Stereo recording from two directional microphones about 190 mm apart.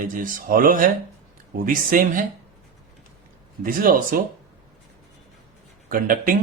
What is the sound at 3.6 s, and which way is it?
Speech, 45° right (ahead or behind).